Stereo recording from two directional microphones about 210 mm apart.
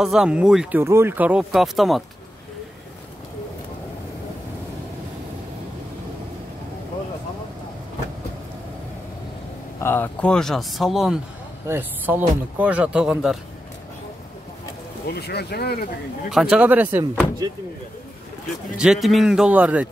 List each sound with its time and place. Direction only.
0.0 s speech: 5° right (ahead or behind)
9.8 s speech: 10° left (ahead or behind)
15.0 s speech: 50° left (ahead or behind)
16.3 s speech: 5° right (ahead or behind)
18.8 s speech: centre (ahead or behind)